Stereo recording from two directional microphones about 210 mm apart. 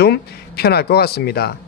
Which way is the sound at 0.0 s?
50° left (ahead or behind).